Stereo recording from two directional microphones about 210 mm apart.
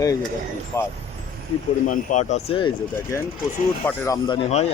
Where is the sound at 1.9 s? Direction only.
35° left (ahead or behind).